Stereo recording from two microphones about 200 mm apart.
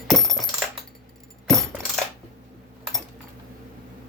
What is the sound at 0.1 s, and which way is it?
Coin, centre (ahead or behind).